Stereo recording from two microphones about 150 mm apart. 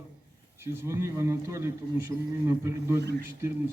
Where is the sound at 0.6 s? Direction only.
15° right (ahead or behind).